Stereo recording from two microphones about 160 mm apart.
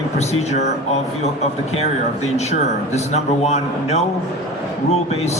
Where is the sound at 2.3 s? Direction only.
45° left (ahead or behind).